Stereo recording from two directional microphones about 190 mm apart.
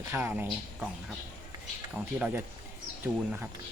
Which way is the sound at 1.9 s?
5° right (ahead or behind).